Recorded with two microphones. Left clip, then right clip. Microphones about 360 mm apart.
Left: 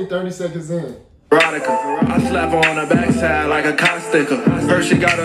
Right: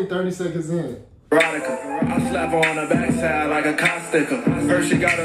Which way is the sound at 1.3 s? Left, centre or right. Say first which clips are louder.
Left 5 dB; left.